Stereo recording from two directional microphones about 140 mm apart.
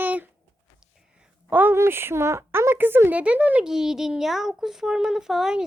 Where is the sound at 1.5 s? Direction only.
15° right (ahead or behind).